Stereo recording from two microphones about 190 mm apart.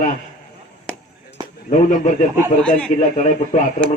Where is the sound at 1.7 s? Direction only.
40° left (ahead or behind).